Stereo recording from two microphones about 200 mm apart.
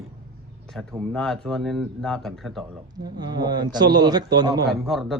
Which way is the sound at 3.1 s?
20° right (ahead or behind).